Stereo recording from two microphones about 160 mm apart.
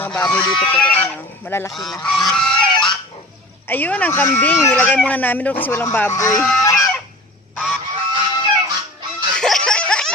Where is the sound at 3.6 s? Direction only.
10° left (ahead or behind).